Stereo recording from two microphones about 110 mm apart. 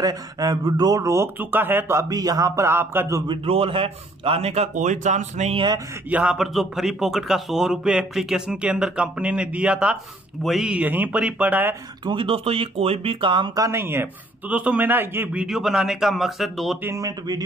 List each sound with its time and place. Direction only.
0.0 s speech: 35° right (ahead or behind)
3.4 s a man's voice: 60° right (ahead or behind); by 5.6 s 90° right
6.0 s speech: 10° right (ahead or behind)
12.1 s a man's voice: 50° right (ahead or behind)
13.6 s speech: 25° right (ahead or behind)
15.4 s speech: 5° right (ahead or behind)
16.8 s speech: 30° right (ahead or behind)